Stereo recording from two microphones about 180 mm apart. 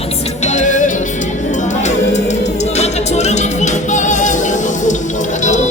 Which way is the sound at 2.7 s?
40° left (ahead or behind).